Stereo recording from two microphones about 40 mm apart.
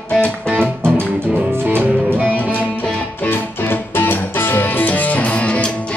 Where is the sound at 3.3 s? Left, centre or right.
Left.